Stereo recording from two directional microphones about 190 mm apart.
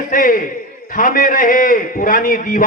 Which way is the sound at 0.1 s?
45° left (ahead or behind).